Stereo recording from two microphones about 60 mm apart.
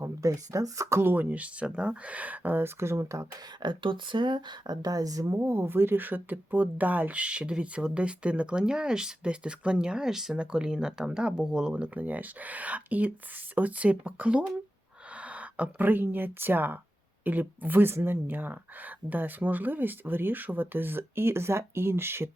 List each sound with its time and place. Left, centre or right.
0.0 s speech: right
1.1 s speech: right
4.7 s speech: right
5.4 s speech: right